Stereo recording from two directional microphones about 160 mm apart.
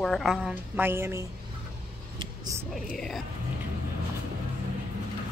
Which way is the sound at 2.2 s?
25° right (ahead or behind).